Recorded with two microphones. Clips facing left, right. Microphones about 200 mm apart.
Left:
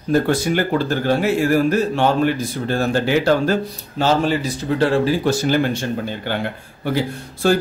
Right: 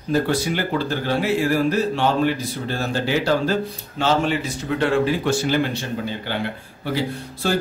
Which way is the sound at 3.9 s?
40° left (ahead or behind).